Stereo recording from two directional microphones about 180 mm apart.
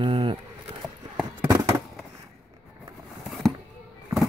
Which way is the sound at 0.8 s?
5° right (ahead or behind).